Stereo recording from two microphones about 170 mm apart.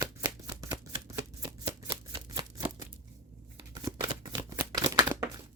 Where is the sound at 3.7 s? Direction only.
25° right (ahead or behind).